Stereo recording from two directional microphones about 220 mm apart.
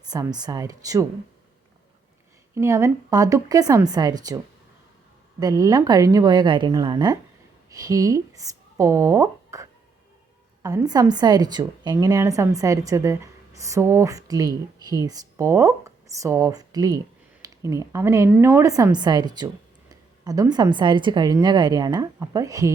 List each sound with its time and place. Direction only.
0.1 s a woman's voice: 20° right (ahead or behind)
2.6 s a woman's voice: 15° right (ahead or behind)
5.4 s a woman's voice: 15° right (ahead or behind)